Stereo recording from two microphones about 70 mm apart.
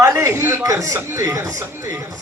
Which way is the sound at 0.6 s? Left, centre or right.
Right.